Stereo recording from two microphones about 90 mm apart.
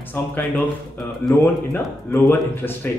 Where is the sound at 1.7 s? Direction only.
20° left (ahead or behind).